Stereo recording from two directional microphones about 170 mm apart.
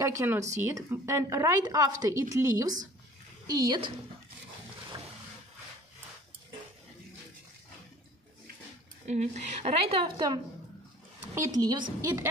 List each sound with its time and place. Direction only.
0.0 s a woman's voice: 15° right (ahead or behind)
9.0 s a woman's voice: 45° right (ahead or behind); by 12.3 s 20° right (ahead or behind)